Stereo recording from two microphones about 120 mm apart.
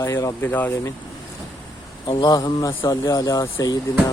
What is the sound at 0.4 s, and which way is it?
Speech, 15° left (ahead or behind).